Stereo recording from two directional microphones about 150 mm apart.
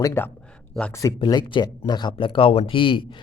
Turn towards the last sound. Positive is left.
turn(degrees=35)  # may be behind; listen again after turning